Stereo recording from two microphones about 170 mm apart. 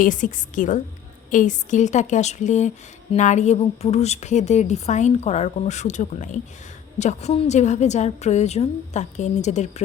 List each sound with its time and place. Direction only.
0.0 s speech: 50° left (ahead or behind)